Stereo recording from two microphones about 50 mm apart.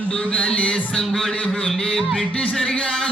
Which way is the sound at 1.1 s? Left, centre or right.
Centre.